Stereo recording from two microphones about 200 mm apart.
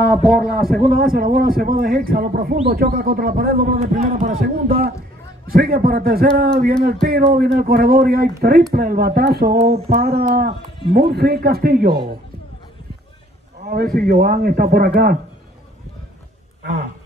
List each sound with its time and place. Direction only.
0.4 s a man's voice: 50° right (ahead or behind)
13.7 s a man's voice: 50° right (ahead or behind)
16.6 s a sound: 55° right (ahead or behind)